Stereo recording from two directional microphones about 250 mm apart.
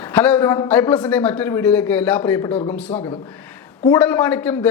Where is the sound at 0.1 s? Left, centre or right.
Centre.